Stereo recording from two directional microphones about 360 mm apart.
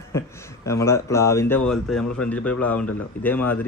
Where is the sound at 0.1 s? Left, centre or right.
Centre.